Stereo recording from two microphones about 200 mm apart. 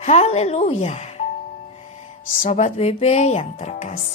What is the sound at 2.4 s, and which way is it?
Speech, 35° left (ahead or behind).